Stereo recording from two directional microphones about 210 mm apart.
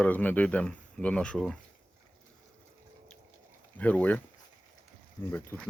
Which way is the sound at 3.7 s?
5° left (ahead or behind).